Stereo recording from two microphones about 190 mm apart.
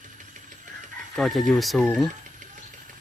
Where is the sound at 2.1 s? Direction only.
40° right (ahead or behind).